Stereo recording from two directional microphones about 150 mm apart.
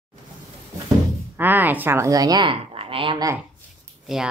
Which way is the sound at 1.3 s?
15° right (ahead or behind).